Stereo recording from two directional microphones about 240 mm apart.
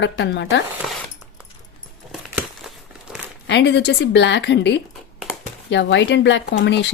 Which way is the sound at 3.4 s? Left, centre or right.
Left.